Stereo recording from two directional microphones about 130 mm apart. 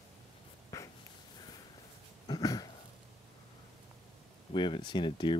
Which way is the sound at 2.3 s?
30° left (ahead or behind).